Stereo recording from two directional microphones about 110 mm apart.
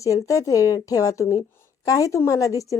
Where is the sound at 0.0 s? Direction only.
30° left (ahead or behind).